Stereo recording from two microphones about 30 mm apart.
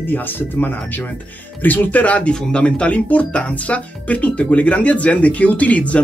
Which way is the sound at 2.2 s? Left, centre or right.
Left.